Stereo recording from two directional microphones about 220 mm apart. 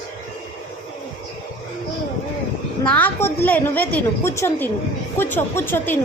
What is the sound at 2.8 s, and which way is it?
A woman's voice, 5° left (ahead or behind).